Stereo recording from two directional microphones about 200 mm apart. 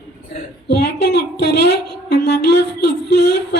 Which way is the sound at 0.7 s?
55° left (ahead or behind).